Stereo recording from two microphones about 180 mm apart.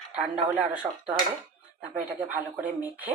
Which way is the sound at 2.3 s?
10° right (ahead or behind).